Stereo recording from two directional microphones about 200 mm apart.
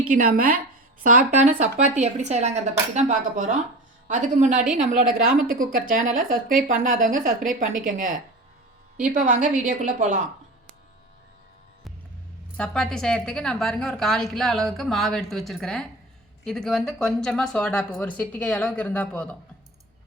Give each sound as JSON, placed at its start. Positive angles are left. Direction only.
{"t": 0.1, "sound": "a woman's voice", "side_deg": -45}
{"t": 9.1, "sound": "a woman's voice", "side_deg": -40}
{"t": 12.5, "sound": "a woman's voice", "side_deg": 5}